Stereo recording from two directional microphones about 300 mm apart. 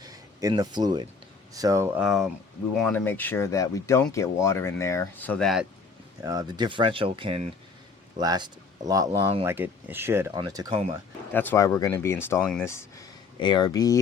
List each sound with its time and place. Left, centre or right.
0.0 s speech: centre
6.2 s speech: centre
11.3 s speech: centre